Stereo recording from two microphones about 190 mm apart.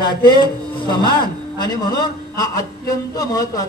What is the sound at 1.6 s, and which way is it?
A man's voice, 20° left (ahead or behind).